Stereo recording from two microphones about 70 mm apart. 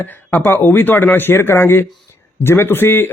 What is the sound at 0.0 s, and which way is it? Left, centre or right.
A man's voice, left.